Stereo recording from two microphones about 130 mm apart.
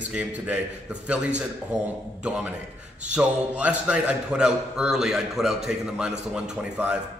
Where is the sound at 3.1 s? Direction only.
10° right (ahead or behind).